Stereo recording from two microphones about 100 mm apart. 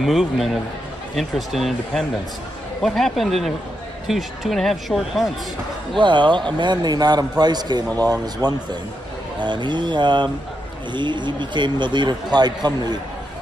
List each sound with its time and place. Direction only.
0.0 s speech: centre (ahead or behind)
5.9 s a man's voice: 50° right (ahead or behind)